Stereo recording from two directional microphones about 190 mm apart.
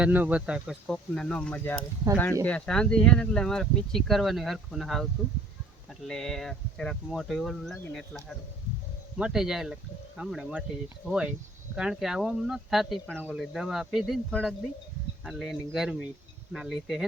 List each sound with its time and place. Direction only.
0.0 s speech: 10° right (ahead or behind)
6.1 s speech: centre (ahead or behind)